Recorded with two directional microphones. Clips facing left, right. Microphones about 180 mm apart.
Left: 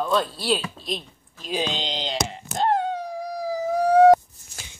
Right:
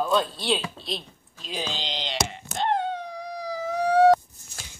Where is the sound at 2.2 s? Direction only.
40° left (ahead or behind).